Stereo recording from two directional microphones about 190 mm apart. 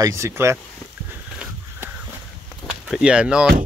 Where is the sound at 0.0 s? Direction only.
15° right (ahead or behind).